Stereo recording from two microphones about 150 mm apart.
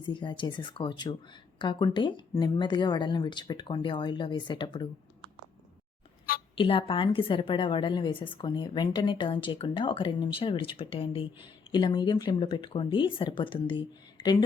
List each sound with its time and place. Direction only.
0.0 s a woman's voice: 30° left (ahead or behind)
6.6 s a woman's voice: 35° left (ahead or behind)